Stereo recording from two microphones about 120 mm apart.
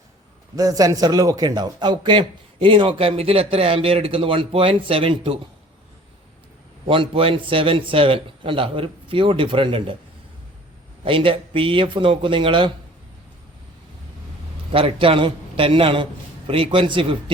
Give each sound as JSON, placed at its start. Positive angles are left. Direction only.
{"t": 0.5, "sound": "speech", "side_deg": -30}
{"t": 6.8, "sound": "speech", "side_deg": -50}
{"t": 11.0, "sound": "speech", "side_deg": -45}
{"t": 14.7, "sound": "speech", "side_deg": -50}